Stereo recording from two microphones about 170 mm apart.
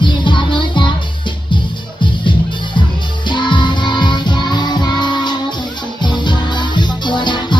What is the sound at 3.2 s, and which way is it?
Music, 25° left (ahead or behind).